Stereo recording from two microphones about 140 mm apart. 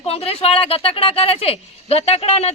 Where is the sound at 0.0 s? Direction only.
45° left (ahead or behind).